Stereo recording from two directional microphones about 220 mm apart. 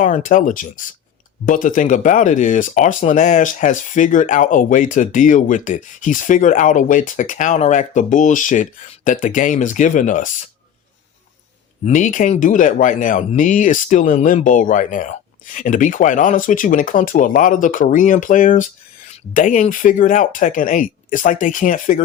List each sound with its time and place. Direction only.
0.0 s speech: 35° left (ahead or behind)
11.9 s speech: 35° left (ahead or behind)